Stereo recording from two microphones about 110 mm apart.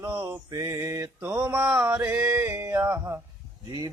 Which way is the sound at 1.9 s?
20° right (ahead or behind).